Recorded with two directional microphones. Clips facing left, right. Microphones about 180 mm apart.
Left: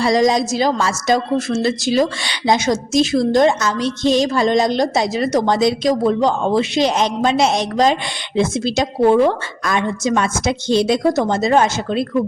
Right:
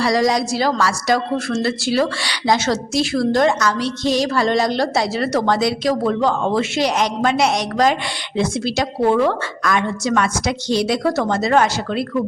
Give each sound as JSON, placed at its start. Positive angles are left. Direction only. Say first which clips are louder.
{"t": 0.0, "sound": "a woman's voice", "louder": "left 2 dB", "side_deg": 20}